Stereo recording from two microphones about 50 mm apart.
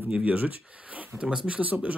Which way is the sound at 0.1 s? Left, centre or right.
Right.